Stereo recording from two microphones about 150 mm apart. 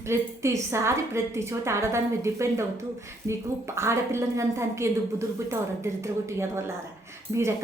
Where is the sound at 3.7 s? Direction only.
20° right (ahead or behind).